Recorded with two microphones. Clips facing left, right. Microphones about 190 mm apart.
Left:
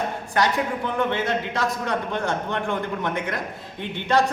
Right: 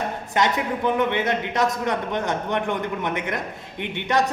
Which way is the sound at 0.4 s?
20° right (ahead or behind).